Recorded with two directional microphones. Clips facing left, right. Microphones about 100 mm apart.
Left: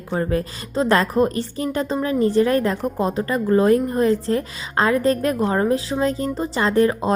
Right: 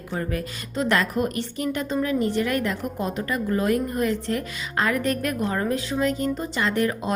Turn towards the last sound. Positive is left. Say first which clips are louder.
# left 6 dB
turn(degrees=30)  # may be behind; listen again after turning